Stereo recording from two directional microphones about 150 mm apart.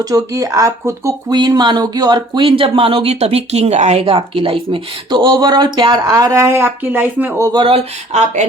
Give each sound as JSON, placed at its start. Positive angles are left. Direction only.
{"t": 0.0, "sound": "speech", "side_deg": -25}
{"t": 7.6, "sound": "speech", "side_deg": -45}